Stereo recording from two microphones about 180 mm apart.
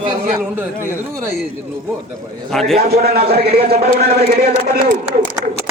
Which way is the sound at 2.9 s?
60° right (ahead or behind).